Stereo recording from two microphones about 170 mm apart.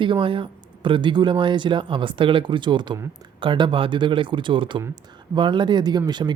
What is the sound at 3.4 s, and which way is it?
A woman's voice, 30° right (ahead or behind).